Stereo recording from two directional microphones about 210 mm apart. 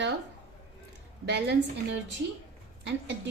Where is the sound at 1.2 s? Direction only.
55° right (ahead or behind).